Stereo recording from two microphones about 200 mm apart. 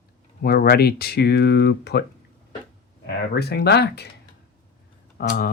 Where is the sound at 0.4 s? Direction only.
50° left (ahead or behind).